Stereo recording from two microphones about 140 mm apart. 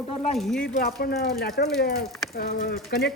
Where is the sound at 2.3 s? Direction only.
90° left.